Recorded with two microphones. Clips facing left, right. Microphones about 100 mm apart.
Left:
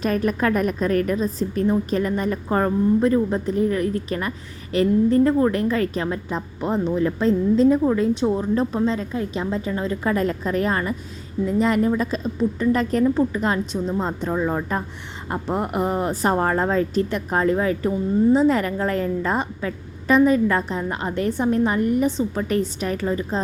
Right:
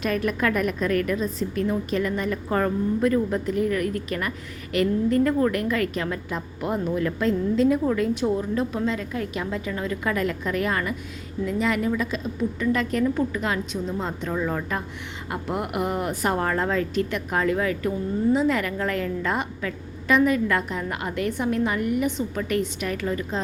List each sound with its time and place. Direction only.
0.0 s a woman's voice: 35° left (ahead or behind)